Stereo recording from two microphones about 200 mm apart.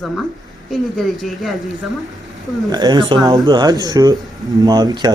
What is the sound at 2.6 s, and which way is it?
Speech, 20° right (ahead or behind).